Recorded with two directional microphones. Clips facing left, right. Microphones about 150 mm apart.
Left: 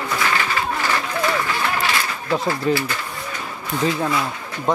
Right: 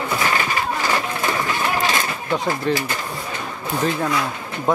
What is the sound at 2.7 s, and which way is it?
Speech, 5° left (ahead or behind).